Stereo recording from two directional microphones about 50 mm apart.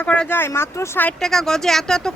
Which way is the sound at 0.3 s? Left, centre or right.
Left.